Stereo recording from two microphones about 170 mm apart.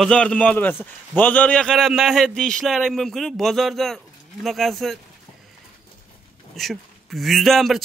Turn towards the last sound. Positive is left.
turn(degrees=0)  # may be behind; listen again after turning